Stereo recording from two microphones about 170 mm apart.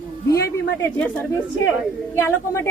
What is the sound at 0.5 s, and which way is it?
A woman's voice, 15° left (ahead or behind).